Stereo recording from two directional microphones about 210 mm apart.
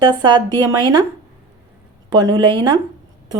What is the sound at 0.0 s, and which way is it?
Speech, 20° right (ahead or behind).